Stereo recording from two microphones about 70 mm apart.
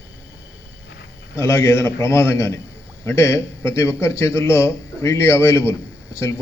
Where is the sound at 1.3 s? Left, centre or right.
Left.